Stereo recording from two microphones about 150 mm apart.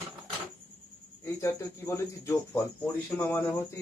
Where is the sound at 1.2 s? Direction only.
20° left (ahead or behind).